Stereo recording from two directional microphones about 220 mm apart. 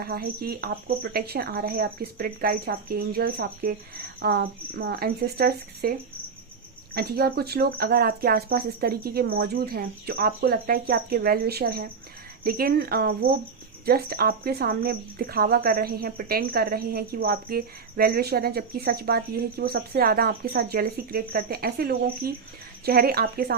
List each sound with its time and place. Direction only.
0.0 s speech: 45° right (ahead or behind)
6.9 s speech: 45° right (ahead or behind)